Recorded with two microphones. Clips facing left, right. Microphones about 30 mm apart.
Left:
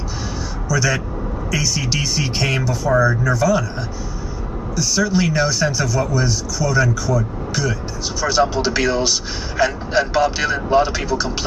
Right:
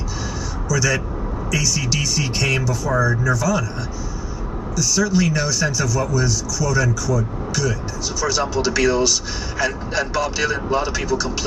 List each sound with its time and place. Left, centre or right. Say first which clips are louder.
0.7 s a man's voice: left 1 dB; left
4.7 s speech: even; left
8.2 s speech: left 4 dB; left